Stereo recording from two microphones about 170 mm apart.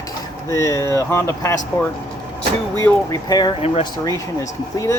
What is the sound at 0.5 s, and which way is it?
Speech, 15° left (ahead or behind).